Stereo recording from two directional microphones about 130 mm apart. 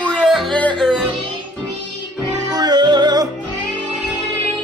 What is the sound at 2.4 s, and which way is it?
Music, 30° right (ahead or behind).